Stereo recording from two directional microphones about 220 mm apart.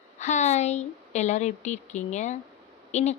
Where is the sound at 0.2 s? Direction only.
35° left (ahead or behind).